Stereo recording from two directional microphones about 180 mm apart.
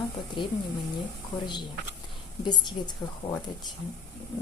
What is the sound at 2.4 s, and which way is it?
Speech, 25° left (ahead or behind).